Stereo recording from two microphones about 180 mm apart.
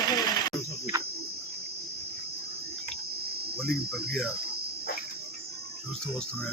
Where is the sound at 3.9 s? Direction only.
Centre (ahead or behind).